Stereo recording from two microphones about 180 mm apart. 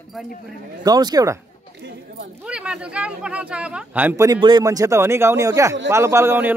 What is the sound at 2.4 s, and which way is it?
A man's voice, 5° right (ahead or behind).